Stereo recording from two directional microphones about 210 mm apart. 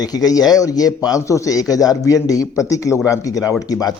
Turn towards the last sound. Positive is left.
turn(degrees=15)  # may be behind; listen again after turning